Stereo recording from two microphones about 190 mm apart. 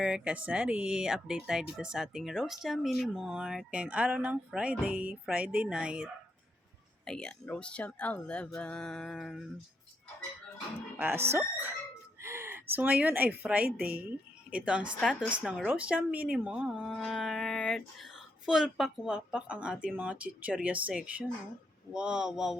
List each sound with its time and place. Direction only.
0.0 s speech: 5° right (ahead or behind)
10.9 s speech: 10° right (ahead or behind)
13.7 s speech: 50° right (ahead or behind)
14.6 s speech: 5° right (ahead or behind)